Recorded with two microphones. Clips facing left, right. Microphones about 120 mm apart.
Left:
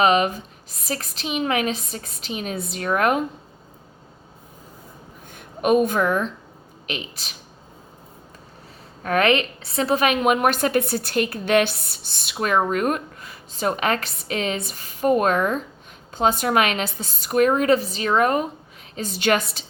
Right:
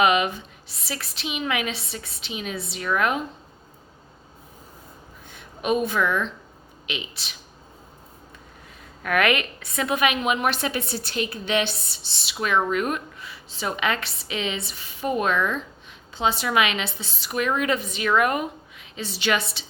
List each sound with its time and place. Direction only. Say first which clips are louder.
0.0 s a woman's voice: left 2 dB; 35° left (ahead or behind)
5.3 s a woman's voice: left 5 dB; 50° left (ahead or behind)
9.0 s a woman's voice: left 3 dB; 30° left (ahead or behind)
18.9 s a woman's voice: left 4 dB; 45° left (ahead or behind)